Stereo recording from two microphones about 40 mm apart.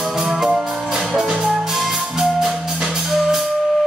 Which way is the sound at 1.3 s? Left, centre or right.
Centre.